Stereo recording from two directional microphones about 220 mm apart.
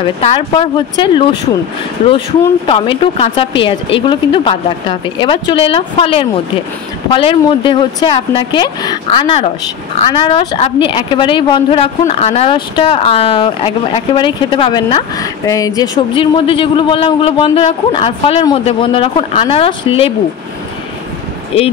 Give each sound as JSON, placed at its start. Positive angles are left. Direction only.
{"t": 0.0, "sound": "speech", "side_deg": 25}
{"t": 2.6, "sound": "speech", "side_deg": 25}